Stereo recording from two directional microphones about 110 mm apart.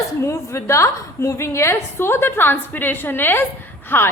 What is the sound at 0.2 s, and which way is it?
A woman's voice, 25° left (ahead or behind).